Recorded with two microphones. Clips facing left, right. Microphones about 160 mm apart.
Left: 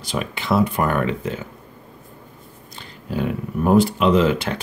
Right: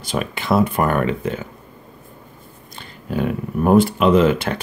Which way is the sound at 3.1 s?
55° right (ahead or behind).